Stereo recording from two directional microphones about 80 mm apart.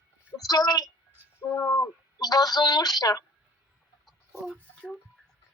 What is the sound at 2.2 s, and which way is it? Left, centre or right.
A woman's voice, left.